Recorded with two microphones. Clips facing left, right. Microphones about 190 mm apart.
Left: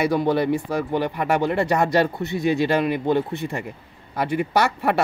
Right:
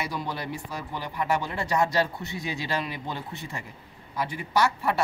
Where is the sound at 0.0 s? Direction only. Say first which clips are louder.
Left 13 dB; 60° left (ahead or behind).